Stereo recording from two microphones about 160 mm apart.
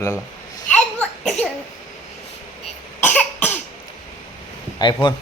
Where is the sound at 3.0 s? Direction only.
10° left (ahead or behind).